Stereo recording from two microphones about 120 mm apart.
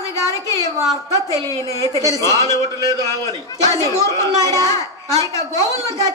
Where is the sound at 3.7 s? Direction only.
25° left (ahead or behind).